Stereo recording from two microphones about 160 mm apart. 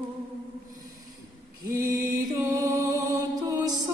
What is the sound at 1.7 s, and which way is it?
Music, 20° right (ahead or behind).